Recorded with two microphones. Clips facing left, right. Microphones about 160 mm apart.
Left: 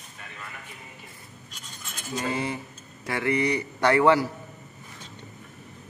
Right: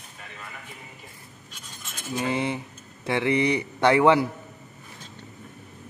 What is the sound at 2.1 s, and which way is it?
A man's voice, 20° right (ahead or behind).